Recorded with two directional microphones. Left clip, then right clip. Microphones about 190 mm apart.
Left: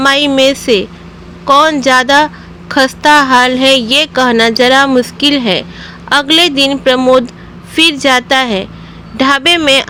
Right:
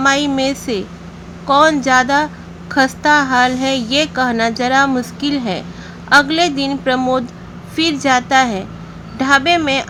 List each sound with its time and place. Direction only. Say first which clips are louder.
0.0 s a woman's voice: left 6 dB; 20° left (ahead or behind)